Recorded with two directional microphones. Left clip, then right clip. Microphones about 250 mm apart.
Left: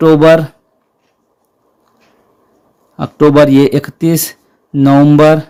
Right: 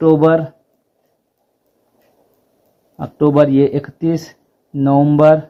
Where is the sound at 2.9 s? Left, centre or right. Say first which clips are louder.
Left 5 dB; left.